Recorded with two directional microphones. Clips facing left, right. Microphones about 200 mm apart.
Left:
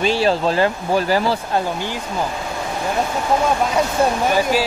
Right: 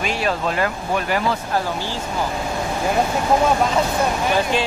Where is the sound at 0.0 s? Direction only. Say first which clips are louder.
Left 5 dB; 30° left (ahead or behind).